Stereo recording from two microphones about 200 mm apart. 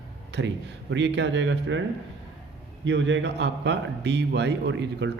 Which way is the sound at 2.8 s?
65° right (ahead or behind).